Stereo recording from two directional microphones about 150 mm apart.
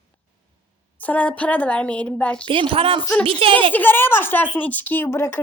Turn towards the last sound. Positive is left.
turn(degrees=15)  # may be behind; listen again after turning